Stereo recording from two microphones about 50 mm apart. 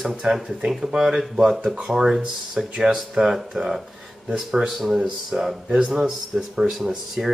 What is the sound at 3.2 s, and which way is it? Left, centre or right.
Speech, centre.